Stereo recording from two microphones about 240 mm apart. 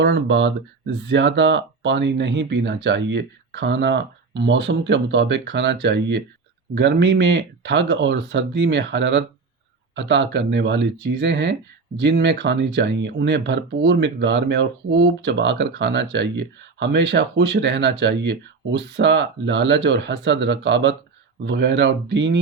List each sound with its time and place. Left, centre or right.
0.0 s speech: right